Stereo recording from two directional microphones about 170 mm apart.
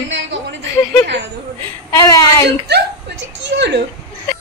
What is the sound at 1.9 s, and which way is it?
Speech, 20° left (ahead or behind).